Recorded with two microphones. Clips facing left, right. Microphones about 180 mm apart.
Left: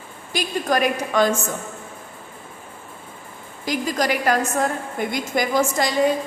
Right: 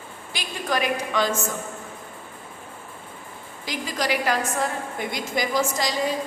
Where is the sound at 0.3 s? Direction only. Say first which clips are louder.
Left 5 dB; 45° left (ahead or behind).